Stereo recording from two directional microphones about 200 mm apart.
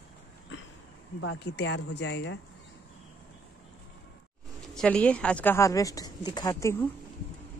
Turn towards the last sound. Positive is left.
turn(degrees=10)  # may be behind; listen again after turning